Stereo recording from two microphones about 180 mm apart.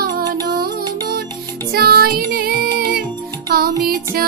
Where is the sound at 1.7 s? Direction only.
60° right (ahead or behind).